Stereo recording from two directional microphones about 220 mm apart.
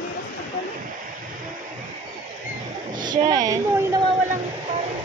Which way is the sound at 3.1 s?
20° right (ahead or behind).